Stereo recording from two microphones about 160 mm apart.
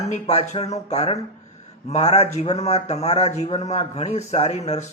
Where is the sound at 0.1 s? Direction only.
45° left (ahead or behind).